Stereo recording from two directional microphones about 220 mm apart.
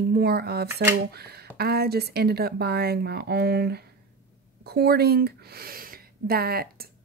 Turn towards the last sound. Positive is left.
turn(degrees=-45)  # may be behind; listen again after turning